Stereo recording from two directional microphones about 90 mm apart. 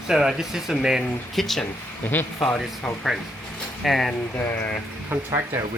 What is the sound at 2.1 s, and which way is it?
Speech, 20° left (ahead or behind).